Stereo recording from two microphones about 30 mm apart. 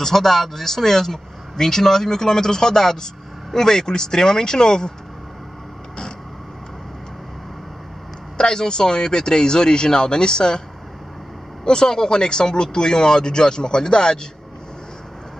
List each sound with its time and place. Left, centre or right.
0.0 s speech: centre
8.4 s speech: left
11.6 s speech: left